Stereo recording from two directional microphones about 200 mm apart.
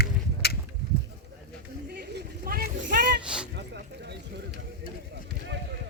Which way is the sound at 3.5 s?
55° right (ahead or behind).